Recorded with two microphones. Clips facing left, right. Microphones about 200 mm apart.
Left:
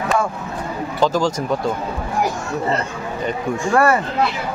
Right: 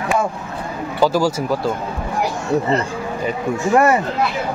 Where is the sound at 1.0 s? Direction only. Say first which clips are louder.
Right 2 dB; 10° right (ahead or behind).